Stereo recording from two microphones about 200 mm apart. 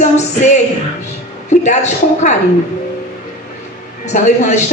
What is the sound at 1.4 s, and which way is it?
Speech, 35° left (ahead or behind).